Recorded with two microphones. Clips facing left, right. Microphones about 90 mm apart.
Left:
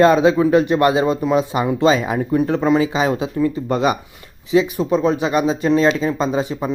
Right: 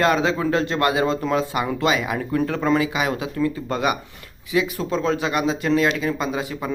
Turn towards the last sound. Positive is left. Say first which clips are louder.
# left 6 dB
turn(degrees=25)  # may be behind; listen again after turning